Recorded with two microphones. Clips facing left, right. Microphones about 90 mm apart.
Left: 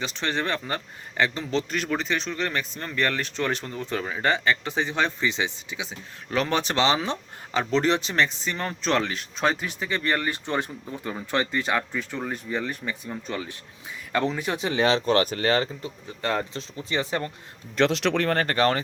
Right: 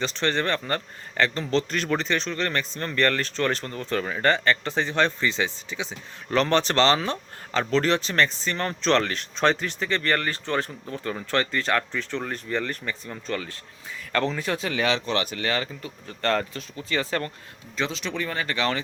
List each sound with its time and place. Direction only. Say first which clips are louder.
0.0 s a man's voice: right 3 dB; 10° left (ahead or behind); by 15.9 s 30° left (ahead or behind)
16.0 s a man's voice: right 3 dB; 15° left (ahead or behind)
17.7 s speech: left 7 dB; 70° left (ahead or behind); by 18.8 s 40° left (ahead or behind)